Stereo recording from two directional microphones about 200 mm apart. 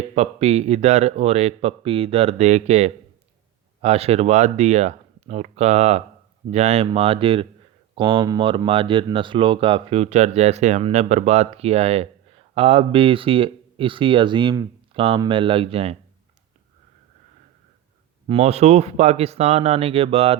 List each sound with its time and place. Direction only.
0.1 s speech: 35° right (ahead or behind)
18.3 s speech: 30° right (ahead or behind)